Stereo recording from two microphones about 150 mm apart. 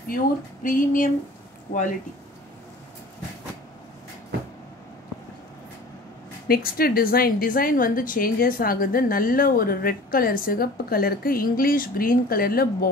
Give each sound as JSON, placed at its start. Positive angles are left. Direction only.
{"t": 0.7, "sound": "speech", "side_deg": 60}
{"t": 6.4, "sound": "a woman's voice", "side_deg": 85}